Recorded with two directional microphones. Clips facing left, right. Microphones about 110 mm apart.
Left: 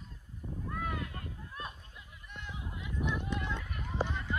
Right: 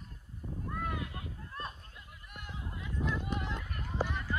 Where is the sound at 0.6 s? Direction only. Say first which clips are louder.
Even; centre (ahead or behind).